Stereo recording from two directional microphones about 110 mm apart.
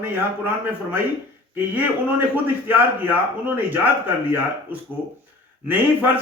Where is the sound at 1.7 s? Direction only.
15° right (ahead or behind).